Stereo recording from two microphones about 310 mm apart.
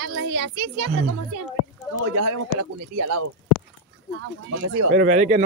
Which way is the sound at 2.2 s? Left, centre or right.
Right.